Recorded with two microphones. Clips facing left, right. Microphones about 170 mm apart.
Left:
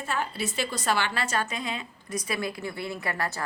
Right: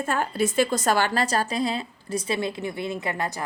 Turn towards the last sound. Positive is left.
turn(degrees=-20)  # may be behind; listen again after turning